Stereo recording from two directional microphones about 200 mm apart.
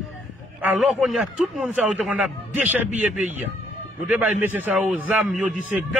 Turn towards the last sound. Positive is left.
turn(degrees=-5)  # may be behind; listen again after turning